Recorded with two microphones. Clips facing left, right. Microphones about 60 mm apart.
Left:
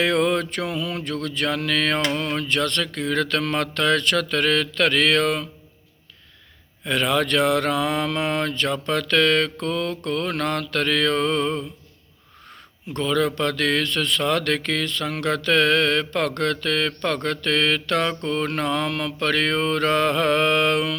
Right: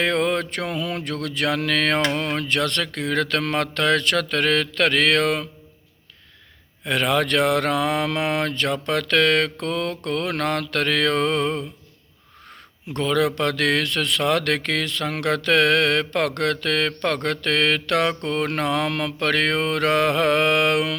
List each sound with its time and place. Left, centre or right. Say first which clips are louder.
0.0 s speech: left 1 dB; right
2.1 s mantra: even; right
6.8 s mantra: right 1 dB; right
13.0 s speech: right 1 dB; right